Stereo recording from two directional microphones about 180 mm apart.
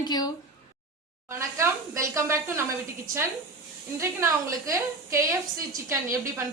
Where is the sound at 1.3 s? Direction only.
15° right (ahead or behind).